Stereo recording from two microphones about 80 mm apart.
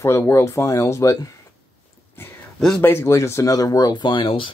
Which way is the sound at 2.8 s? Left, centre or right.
Left.